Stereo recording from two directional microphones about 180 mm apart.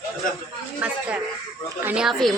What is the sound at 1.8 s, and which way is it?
Speech, 5° right (ahead or behind).